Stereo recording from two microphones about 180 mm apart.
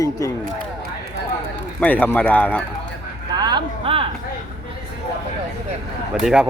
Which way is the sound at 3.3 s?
25° right (ahead or behind).